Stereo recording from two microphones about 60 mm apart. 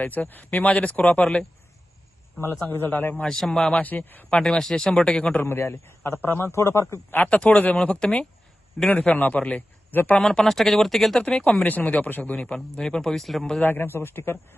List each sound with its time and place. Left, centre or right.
0.0 s speech: left
2.4 s speech: left
3.2 s a man's voice: centre
3.8 s speech: left
4.3 s a man's voice: centre
5.4 s speech: left
6.6 s a man's voice: left
7.3 s a man's voice: left
10.2 s speech: centre
11.2 s a man's voice: centre
11.5 s speech: left
12.8 s a man's voice: centre
13.6 s speech: left